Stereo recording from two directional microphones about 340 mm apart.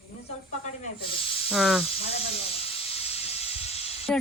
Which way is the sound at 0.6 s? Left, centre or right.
Centre.